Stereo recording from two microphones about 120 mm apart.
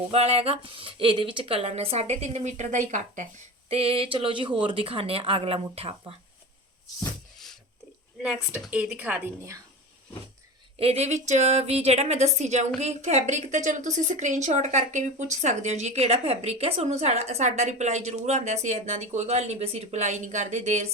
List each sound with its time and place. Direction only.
0.1 s speech: 55° right (ahead or behind); by 3.2 s 90° right
3.7 s speech: 50° right (ahead or behind)
8.2 s a woman's voice: 5° right (ahead or behind)
10.8 s a woman's voice: 60° right (ahead or behind)